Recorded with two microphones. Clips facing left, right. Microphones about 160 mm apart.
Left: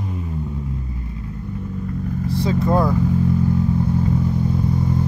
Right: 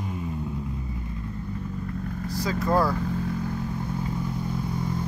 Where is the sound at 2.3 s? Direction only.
25° left (ahead or behind).